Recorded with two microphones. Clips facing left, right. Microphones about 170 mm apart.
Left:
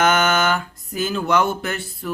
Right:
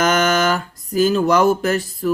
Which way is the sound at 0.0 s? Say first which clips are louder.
Right 2 dB; 35° right (ahead or behind).